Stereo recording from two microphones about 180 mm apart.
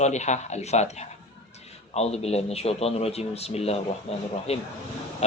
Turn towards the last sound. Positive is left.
turn(degrees=35)  # may be behind; listen again after turning